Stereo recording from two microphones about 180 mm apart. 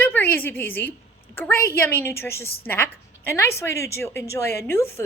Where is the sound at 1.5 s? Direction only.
55° left (ahead or behind).